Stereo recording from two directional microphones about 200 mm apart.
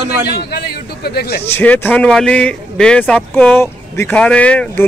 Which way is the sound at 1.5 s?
10° left (ahead or behind).